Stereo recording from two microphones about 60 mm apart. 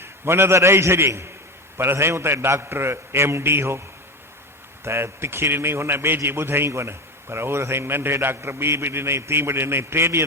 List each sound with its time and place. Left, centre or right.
0.0 s a man's voice: right